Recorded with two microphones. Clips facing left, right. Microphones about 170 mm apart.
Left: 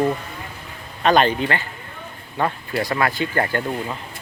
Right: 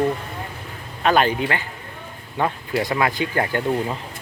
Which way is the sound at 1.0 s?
5° right (ahead or behind).